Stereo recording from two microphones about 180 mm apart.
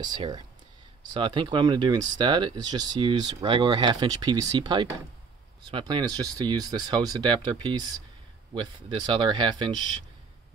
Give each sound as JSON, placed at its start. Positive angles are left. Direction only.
{"t": 0.0, "sound": "speech", "side_deg": -25}